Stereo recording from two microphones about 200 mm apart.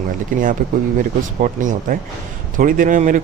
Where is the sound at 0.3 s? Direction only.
40° right (ahead or behind).